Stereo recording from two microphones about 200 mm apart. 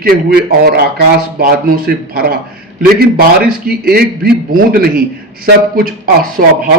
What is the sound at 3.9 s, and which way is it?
Speech, 50° right (ahead or behind).